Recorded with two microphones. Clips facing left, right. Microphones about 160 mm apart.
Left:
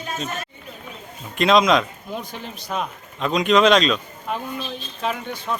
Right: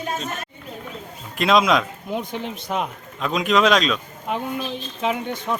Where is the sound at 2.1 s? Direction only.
20° right (ahead or behind).